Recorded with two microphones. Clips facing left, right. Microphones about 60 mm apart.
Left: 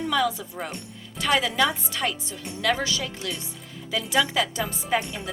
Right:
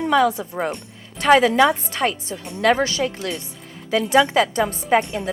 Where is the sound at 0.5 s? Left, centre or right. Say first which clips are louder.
Right 9 dB; right.